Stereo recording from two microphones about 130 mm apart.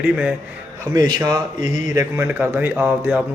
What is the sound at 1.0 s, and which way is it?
A man's voice, 30° right (ahead or behind).